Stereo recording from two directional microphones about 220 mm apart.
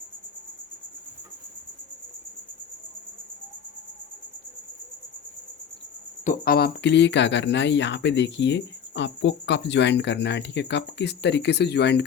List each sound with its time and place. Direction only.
6.2 s speech: 40° left (ahead or behind)